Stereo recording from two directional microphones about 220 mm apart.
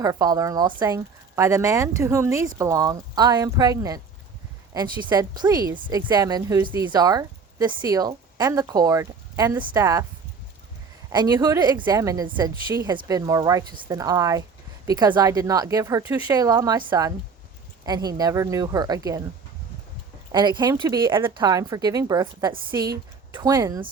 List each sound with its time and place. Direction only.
0.0 s speech: 15° right (ahead or behind)
5.0 s speech: 20° right (ahead or behind)
11.1 s speech: 20° right (ahead or behind)
20.3 s a woman's voice: 20° right (ahead or behind)